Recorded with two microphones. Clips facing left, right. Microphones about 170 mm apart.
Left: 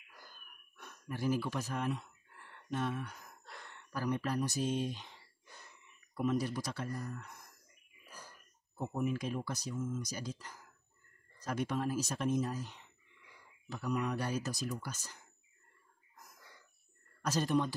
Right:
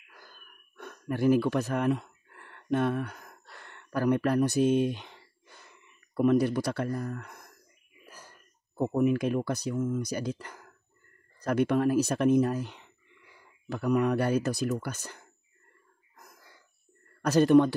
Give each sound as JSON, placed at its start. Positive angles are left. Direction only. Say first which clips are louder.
{"t": 0.7, "sound": "a sound", "louder": "right 10 dB", "side_deg": -60}
{"t": 3.6, "sound": "speech", "louder": "right 10 dB", "side_deg": -65}
{"t": 8.7, "sound": "speech", "louder": "right 10 dB", "side_deg": -75}
{"t": 17.2, "sound": "speech", "louder": "right 12 dB", "side_deg": -65}